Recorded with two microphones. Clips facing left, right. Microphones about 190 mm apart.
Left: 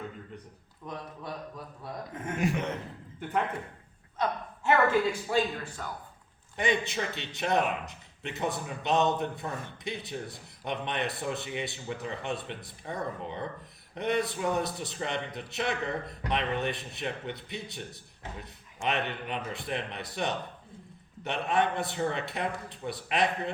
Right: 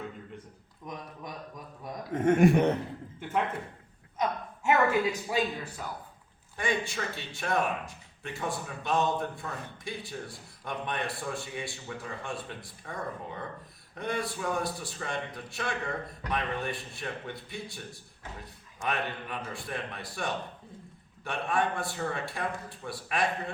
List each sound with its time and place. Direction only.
0.9 s a man's voice: 15° right (ahead or behind)
2.2 s speech: 55° right (ahead or behind)
3.2 s a man's voice: centre (ahead or behind)
6.6 s speech: 20° left (ahead or behind)